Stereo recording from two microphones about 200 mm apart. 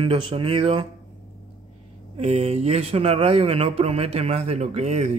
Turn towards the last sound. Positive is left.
turn(degrees=-35)  # may be behind; listen again after turning